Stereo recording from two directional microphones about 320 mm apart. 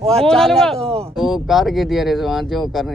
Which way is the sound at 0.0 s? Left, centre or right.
Centre.